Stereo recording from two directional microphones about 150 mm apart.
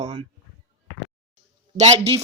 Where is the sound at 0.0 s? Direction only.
40° right (ahead or behind).